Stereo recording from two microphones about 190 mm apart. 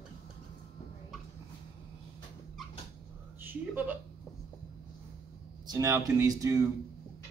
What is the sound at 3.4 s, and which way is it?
Speech, 10° right (ahead or behind).